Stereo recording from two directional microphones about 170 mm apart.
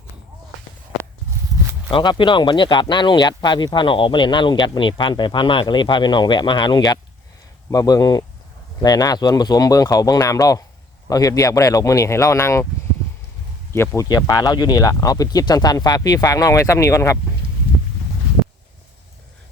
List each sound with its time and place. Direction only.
1.9 s speech: 30° left (ahead or behind)
13.7 s speech: 15° left (ahead or behind)